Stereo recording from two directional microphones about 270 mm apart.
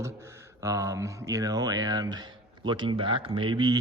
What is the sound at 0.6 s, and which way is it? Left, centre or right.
Speech, centre.